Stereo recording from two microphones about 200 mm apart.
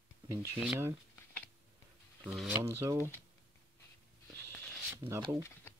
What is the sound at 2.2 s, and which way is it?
Speech, 5° right (ahead or behind).